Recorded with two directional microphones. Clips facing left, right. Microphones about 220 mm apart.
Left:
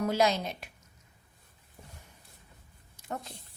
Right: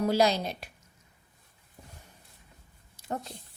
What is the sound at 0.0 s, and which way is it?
Speech, 35° right (ahead or behind).